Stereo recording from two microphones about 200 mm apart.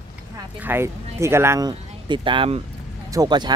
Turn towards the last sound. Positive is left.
turn(degrees=-20)  # may be behind; listen again after turning